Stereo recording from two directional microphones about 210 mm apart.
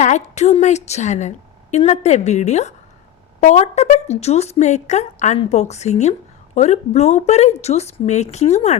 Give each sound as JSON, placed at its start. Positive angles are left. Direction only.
{"t": 0.0, "sound": "a woman's voice", "side_deg": 35}